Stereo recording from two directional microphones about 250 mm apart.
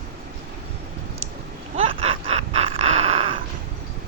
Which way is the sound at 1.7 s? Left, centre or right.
Right.